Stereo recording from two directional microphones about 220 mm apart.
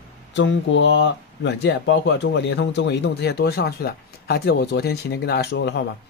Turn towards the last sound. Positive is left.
turn(degrees=50)  # may be behind; listen again after turning